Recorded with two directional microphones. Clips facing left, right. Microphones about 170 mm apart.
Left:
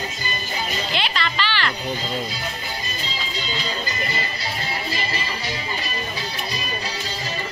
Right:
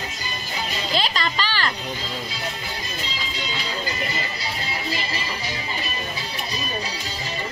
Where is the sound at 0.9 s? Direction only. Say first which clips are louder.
Right 5 dB; 40° right (ahead or behind).